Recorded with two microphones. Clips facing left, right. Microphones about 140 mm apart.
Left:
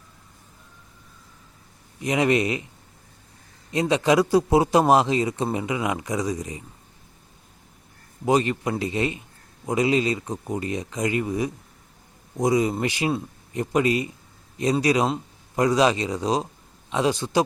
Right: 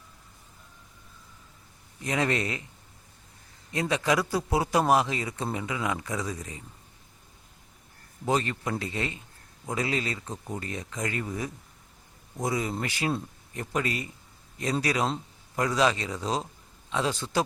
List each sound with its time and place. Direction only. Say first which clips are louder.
2.0 s speech: left 7 dB; 15° left (ahead or behind)
3.7 s speech: left 6 dB; 20° left (ahead or behind)
8.2 s speech: left 6 dB; 15° left (ahead or behind)